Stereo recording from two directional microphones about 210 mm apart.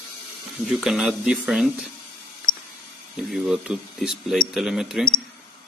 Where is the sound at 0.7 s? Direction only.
Centre (ahead or behind).